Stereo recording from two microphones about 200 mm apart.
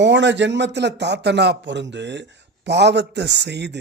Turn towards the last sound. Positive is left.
turn(degrees=-60)  # may be behind; listen again after turning